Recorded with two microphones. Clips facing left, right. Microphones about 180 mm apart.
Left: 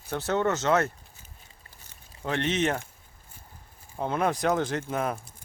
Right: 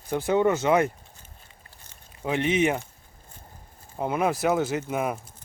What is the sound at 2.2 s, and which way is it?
Speech, 10° right (ahead or behind).